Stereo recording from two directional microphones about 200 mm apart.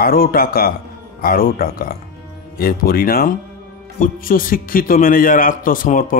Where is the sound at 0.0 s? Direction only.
45° left (ahead or behind).